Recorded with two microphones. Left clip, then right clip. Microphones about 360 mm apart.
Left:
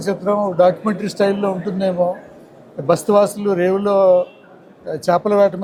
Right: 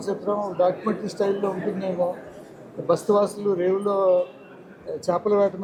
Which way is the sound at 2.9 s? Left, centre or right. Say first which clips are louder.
Left 6 dB; left.